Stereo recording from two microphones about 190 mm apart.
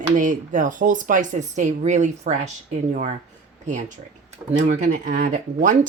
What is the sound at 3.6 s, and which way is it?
Speech, 40° right (ahead or behind).